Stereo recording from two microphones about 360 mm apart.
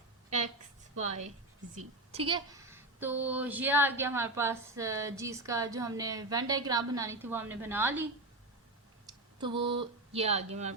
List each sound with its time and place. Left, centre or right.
0.3 s a woman's voice: centre
9.0 s speech: centre